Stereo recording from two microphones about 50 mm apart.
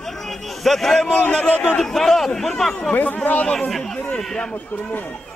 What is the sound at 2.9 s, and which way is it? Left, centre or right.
Speech, left.